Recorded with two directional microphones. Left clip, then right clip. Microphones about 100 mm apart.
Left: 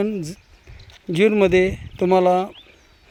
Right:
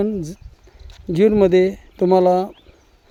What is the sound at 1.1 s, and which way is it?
Speech, 55° right (ahead or behind).